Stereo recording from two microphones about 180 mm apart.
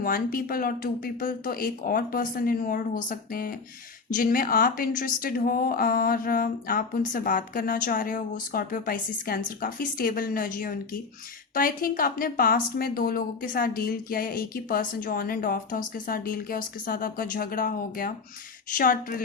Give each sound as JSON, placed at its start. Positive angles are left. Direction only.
{"t": 0.0, "sound": "a woman's voice", "side_deg": 55}